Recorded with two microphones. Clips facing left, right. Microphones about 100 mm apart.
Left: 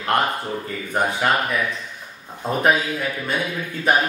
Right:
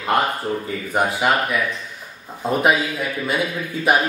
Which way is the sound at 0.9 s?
5° right (ahead or behind).